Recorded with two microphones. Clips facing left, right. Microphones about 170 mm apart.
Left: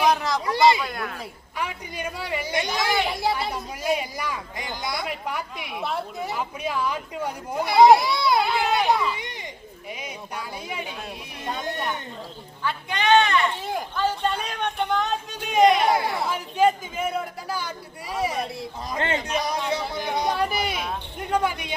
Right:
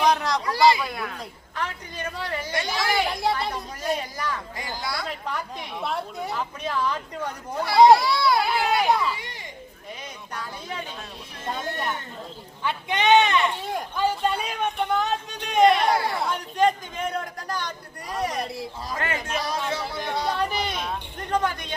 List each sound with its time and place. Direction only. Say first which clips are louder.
0.0 s a sound: even; centre (ahead or behind)
0.4 s a sound: left 1 dB; 25° left (ahead or behind)
0.8 s a man's voice: even; centre (ahead or behind)
1.5 s speech: left 1 dB; 10° left (ahead or behind)
3.1 s speech: even; centre (ahead or behind); by 8.4 s 20° left (ahead or behind)
8.8 s a man's voice: even; centre (ahead or behind)
10.0 s speech: left 2 dB; 10° left (ahead or behind)
12.6 s a man's voice: right 1 dB; 20° right (ahead or behind); by 18.7 s centre (ahead or behind)
18.9 s a man's voice: left 4 dB; 25° left (ahead or behind)